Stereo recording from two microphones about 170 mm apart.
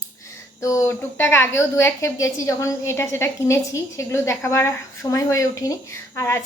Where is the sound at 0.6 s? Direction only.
20° left (ahead or behind).